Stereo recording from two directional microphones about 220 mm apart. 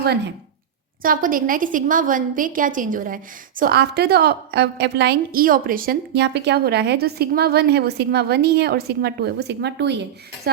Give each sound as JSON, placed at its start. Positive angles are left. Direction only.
{"t": 0.0, "sound": "a woman's voice", "side_deg": -45}